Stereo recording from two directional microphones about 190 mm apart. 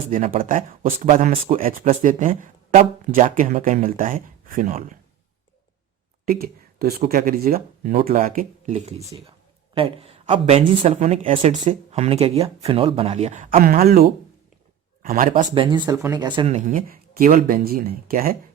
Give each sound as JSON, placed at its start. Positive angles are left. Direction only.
{"t": 0.3, "sound": "speech", "side_deg": -45}
{"t": 6.2, "sound": "a man's voice", "side_deg": -50}
{"t": 15.5, "sound": "speech", "side_deg": -25}
{"t": 16.6, "sound": "speech", "side_deg": -45}